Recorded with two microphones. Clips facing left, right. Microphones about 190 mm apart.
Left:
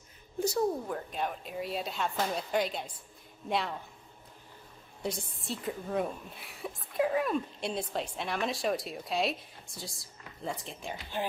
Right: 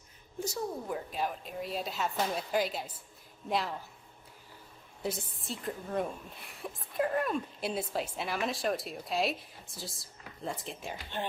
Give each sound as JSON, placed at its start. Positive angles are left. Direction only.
{"t": 0.3, "sound": "a sound", "side_deg": 65}
{"t": 0.9, "sound": "a woman's voice", "side_deg": -5}
{"t": 5.0, "sound": "a woman's voice", "side_deg": 0}